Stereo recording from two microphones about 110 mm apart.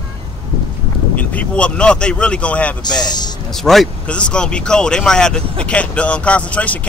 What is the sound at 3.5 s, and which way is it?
Speech, centre (ahead or behind).